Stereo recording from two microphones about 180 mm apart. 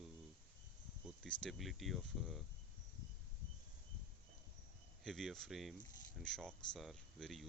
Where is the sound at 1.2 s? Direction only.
Centre (ahead or behind).